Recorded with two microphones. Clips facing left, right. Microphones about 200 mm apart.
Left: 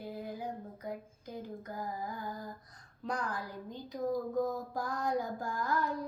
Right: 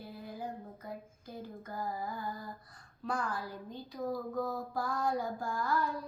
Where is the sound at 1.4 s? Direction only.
15° left (ahead or behind).